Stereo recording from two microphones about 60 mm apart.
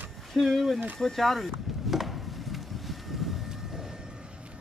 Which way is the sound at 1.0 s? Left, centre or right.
Centre.